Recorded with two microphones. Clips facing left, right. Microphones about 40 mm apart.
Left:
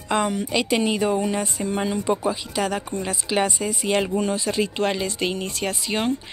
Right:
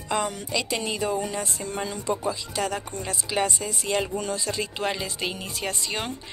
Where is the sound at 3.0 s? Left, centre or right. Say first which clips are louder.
Left 3 dB; left.